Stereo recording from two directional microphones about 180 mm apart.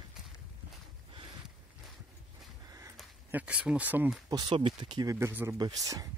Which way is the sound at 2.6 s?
15° right (ahead or behind).